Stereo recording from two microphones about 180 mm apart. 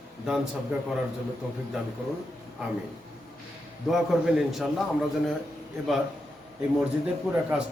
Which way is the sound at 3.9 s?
5° right (ahead or behind).